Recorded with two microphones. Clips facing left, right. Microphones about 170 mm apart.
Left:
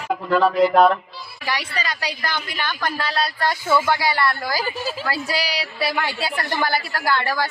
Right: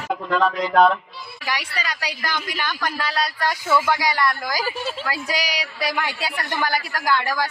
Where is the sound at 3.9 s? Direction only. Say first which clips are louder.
Left 1 dB; 15° right (ahead or behind).